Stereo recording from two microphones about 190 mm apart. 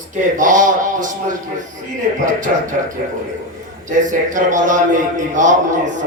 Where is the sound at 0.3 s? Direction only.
40° right (ahead or behind).